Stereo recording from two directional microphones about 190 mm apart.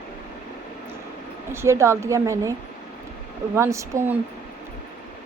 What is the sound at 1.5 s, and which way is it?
A woman's voice, 15° right (ahead or behind).